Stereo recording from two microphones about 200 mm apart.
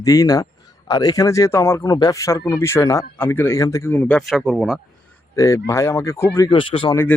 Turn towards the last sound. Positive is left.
turn(degrees=10)  # may be behind; listen again after turning